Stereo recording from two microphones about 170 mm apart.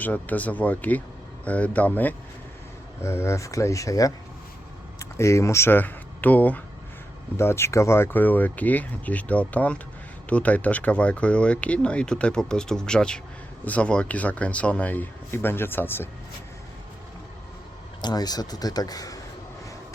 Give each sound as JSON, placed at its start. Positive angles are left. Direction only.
{"t": 0.0, "sound": "speech", "side_deg": 10}
{"t": 18.0, "sound": "a man's voice", "side_deg": 25}